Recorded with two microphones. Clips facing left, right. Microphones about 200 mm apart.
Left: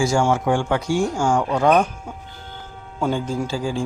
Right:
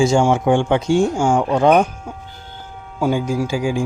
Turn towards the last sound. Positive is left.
turn(degrees=-15)  # may be behind; listen again after turning